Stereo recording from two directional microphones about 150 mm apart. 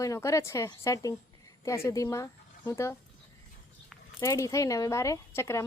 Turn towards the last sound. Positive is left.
turn(degrees=15)  # may be behind; listen again after turning